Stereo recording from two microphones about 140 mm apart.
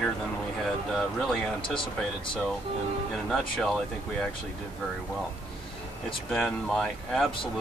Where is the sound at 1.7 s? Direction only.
35° left (ahead or behind).